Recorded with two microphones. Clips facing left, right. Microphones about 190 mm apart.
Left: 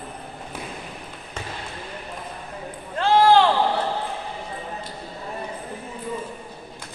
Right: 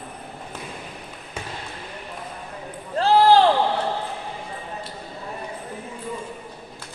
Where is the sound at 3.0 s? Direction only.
35° right (ahead or behind).